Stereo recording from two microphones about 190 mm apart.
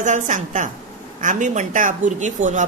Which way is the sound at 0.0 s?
40° right (ahead or behind).